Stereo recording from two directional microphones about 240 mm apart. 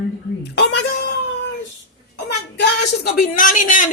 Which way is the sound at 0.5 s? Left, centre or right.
Left.